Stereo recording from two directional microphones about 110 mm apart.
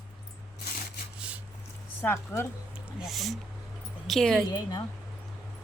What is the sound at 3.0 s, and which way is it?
Speech, centre (ahead or behind).